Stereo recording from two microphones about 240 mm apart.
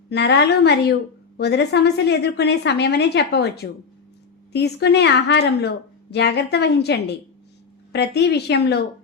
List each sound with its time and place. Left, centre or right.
0.1 s a woman's voice: left